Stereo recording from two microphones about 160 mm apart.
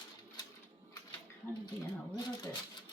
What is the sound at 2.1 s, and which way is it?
Speech, 30° left (ahead or behind).